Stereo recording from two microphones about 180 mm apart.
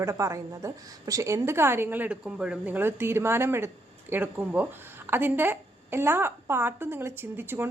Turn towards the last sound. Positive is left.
turn(degrees=-10)  # may be behind; listen again after turning